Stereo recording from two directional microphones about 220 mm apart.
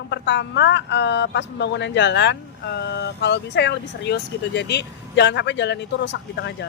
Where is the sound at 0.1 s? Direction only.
50° left (ahead or behind).